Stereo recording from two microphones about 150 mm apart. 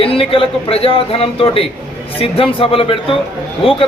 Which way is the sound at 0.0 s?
40° left (ahead or behind).